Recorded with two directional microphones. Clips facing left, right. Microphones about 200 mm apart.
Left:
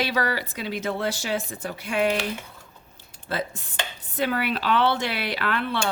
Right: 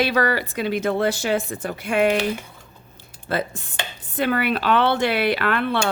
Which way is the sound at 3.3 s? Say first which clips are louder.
Right 4 dB; 55° right (ahead or behind).